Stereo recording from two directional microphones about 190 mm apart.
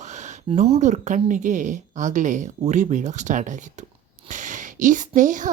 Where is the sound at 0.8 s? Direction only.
40° right (ahead or behind).